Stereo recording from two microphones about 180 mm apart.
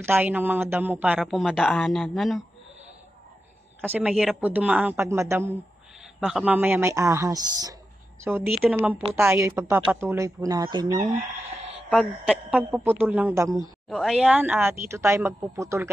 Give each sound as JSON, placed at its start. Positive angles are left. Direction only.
{"t": 0.0, "sound": "speech", "side_deg": -10}
{"t": 3.8, "sound": "speech", "side_deg": -10}
{"t": 6.1, "sound": "speech", "side_deg": -5}
{"t": 11.2, "sound": "a sound", "side_deg": -35}
{"t": 11.9, "sound": "speech", "side_deg": 5}
{"t": 12.4, "sound": "speech", "side_deg": -10}
{"t": 13.8, "sound": "speech", "side_deg": 0}